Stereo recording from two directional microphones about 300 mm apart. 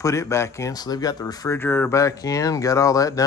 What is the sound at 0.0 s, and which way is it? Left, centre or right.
Speech, centre.